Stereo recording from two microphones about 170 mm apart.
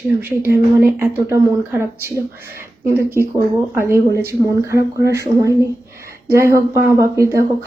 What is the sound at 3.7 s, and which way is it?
A woman's voice, 15° right (ahead or behind).